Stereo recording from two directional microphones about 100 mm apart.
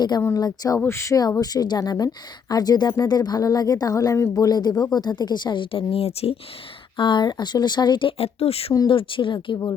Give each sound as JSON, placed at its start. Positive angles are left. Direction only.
{"t": 0.3, "sound": "speech", "side_deg": 40}
{"t": 0.9, "sound": "speech", "side_deg": 30}
{"t": 6.9, "sound": "speech", "side_deg": 50}
{"t": 8.2, "sound": "speech", "side_deg": 85}
{"t": 8.9, "sound": "speech", "side_deg": 60}